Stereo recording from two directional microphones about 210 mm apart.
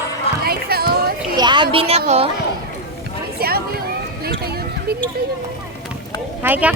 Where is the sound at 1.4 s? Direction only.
20° right (ahead or behind).